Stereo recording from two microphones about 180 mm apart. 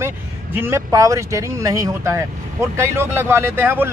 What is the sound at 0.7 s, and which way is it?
A man's voice, 15° right (ahead or behind).